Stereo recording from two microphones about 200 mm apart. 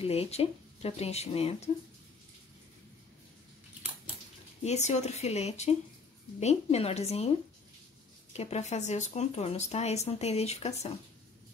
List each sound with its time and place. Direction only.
0.0 s speech: 30° left (ahead or behind)
4.6 s speech: 35° left (ahead or behind)